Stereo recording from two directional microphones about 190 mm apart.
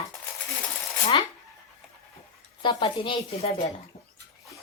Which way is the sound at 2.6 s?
25° left (ahead or behind).